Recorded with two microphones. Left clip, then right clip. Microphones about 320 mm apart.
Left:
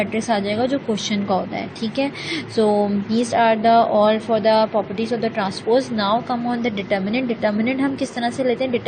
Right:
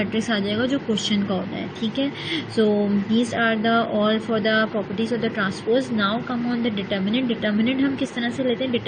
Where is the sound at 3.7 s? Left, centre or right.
Left.